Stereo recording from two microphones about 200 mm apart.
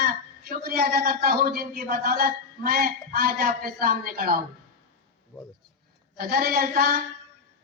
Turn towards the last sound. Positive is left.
turn(degrees=-45)  # may be behind; listen again after turning